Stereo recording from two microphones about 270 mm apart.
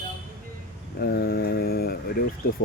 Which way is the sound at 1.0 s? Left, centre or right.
Left.